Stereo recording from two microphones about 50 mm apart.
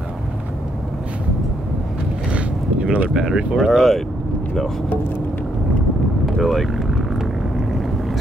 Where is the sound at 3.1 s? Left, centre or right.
Centre.